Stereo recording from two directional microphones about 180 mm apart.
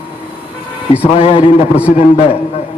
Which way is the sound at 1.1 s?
35° left (ahead or behind).